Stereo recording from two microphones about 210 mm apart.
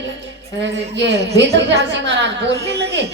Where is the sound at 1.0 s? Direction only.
55° right (ahead or behind).